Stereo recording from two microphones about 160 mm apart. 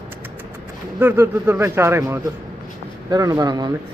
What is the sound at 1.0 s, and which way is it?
Speech, 15° right (ahead or behind).